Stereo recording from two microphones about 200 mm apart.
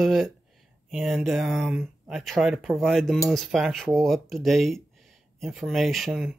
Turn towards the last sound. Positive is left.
turn(degrees=0)  # may be behind; listen again after turning